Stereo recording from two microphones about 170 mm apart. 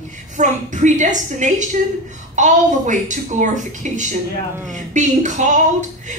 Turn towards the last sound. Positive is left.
turn(degrees=-45)  # may be behind; listen again after turning